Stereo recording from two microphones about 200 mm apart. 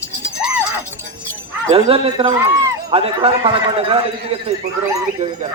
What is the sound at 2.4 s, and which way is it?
Speech, 15° right (ahead or behind).